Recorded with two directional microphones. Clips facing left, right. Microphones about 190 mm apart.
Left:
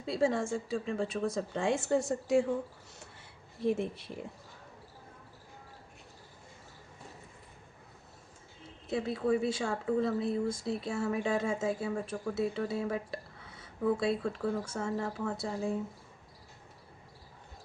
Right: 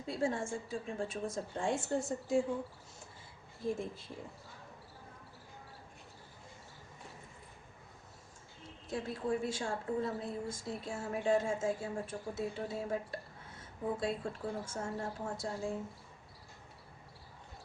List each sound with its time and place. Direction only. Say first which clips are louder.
0.0 s speech: left 5 dB; 80° left
3.0 s a sound: left 1 dB; 70° left (ahead or behind)
8.9 s a woman's voice: left 6 dB; 70° left (ahead or behind)